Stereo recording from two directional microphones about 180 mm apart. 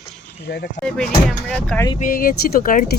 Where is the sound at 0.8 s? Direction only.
5° left (ahead or behind).